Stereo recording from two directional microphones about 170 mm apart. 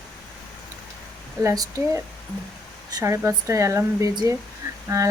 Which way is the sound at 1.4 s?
20° right (ahead or behind).